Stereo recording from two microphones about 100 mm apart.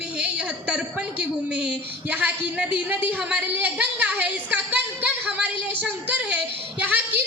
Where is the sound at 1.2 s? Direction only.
10° right (ahead or behind).